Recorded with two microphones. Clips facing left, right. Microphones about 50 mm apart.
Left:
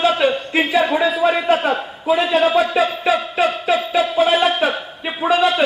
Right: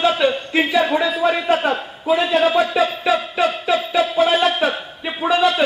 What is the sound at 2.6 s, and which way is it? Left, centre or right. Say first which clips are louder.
Music: left 1 dB; centre.